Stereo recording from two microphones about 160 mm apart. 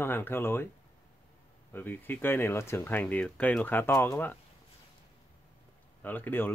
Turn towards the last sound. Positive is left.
turn(degrees=10)  # may be behind; listen again after turning